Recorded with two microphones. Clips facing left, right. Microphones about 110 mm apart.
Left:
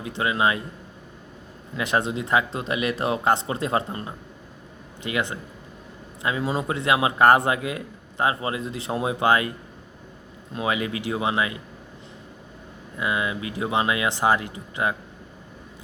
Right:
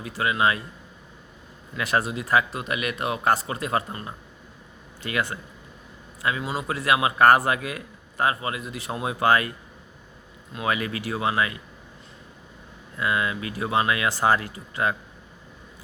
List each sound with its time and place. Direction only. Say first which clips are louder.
0.0 s speech: even; 25° left (ahead or behind)
1.7 s speech: left 1 dB; 20° left (ahead or behind)
6.2 s a man's voice: left 2 dB; 30° left (ahead or behind)
10.5 s speech: left 1 dB; 20° left (ahead or behind)
13.0 s speech: even; 20° left (ahead or behind)